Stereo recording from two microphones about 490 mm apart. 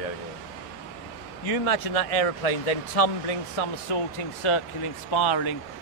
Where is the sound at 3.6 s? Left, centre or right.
Left.